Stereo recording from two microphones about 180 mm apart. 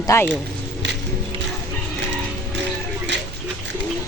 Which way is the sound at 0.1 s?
15° left (ahead or behind).